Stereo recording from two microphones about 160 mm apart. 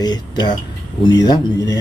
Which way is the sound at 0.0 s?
25° left (ahead or behind).